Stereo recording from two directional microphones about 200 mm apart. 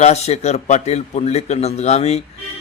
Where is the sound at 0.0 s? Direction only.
35° left (ahead or behind).